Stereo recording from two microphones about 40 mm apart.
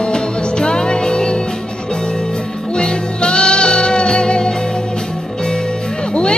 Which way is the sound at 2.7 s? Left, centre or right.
Left.